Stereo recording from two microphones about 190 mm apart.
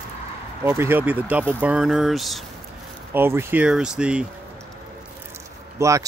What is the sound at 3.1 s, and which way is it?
Speech, 10° right (ahead or behind).